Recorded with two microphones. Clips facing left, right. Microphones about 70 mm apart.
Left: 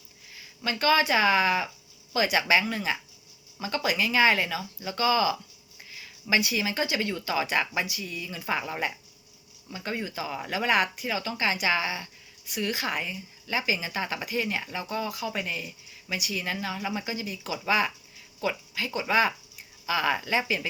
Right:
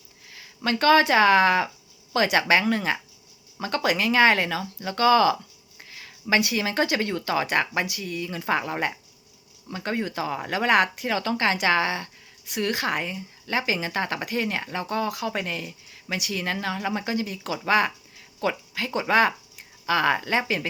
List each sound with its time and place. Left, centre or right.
0.3 s speech: right
18.3 s a sound: right
18.9 s speech: right